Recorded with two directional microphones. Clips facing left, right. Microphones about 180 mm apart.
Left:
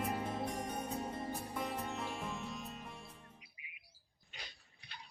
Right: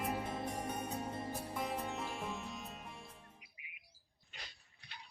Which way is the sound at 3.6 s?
60° right (ahead or behind).